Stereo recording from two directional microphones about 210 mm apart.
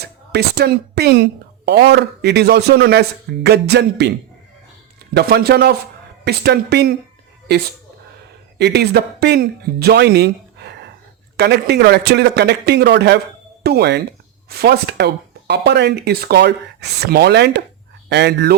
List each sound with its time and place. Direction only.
0.0 s a woman's voice: 50° right (ahead or behind)
5.1 s a woman's voice: 50° right (ahead or behind)
8.5 s a woman's voice: 55° right (ahead or behind)